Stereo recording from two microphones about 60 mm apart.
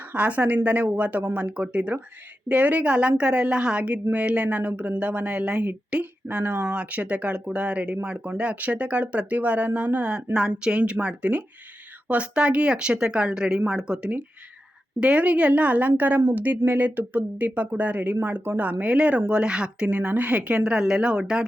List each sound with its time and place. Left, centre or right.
0.1 s speech: right
6.7 s speech: right